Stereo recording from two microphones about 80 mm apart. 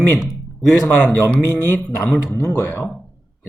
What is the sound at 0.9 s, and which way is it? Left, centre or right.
Speech, left.